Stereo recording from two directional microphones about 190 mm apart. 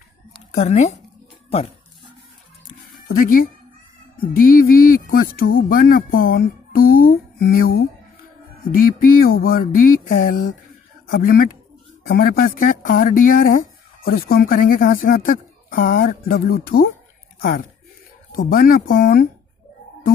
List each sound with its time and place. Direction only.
0.5 s speech: 40° left (ahead or behind)
3.1 s speech: 50° left (ahead or behind)